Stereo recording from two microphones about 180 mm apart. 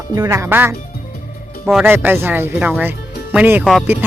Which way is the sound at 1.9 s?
10° right (ahead or behind).